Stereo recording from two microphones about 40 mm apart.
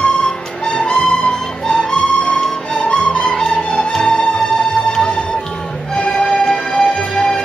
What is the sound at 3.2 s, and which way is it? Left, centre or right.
Music, centre.